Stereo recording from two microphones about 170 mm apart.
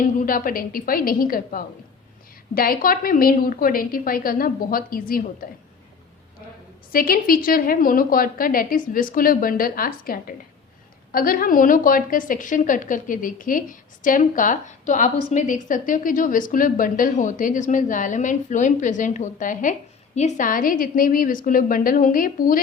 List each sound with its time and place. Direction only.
0.0 s a woman's voice: 55° left (ahead or behind)
6.9 s a woman's voice: 60° left (ahead or behind)